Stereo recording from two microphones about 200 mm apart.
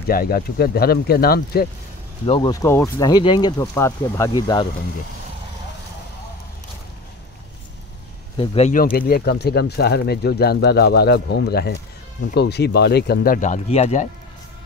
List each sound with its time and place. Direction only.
0.1 s speech: 50° left (ahead or behind)
2.2 s speech: 25° left (ahead or behind)
8.4 s speech: 35° left (ahead or behind)